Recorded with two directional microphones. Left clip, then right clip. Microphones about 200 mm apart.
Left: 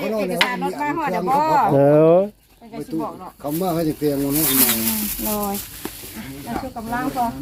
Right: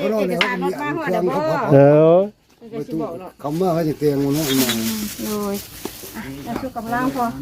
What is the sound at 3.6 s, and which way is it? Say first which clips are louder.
Speech: right 3 dB; 40° right (ahead or behind).